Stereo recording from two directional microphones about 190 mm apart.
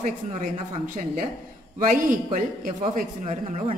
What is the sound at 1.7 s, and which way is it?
Speech, 45° right (ahead or behind).